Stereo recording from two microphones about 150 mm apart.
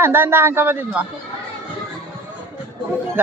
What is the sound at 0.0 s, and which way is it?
Speech, 15° right (ahead or behind).